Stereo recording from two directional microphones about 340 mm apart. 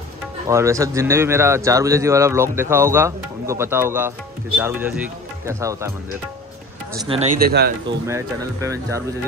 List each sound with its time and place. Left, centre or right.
0.5 s speech: centre
7.1 s speech: right
8.1 s speech: centre